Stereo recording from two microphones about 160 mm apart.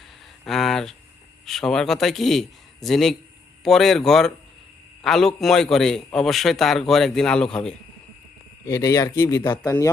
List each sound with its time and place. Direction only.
0.4 s a man's voice: centre (ahead or behind)
8.6 s speech: 20° left (ahead or behind)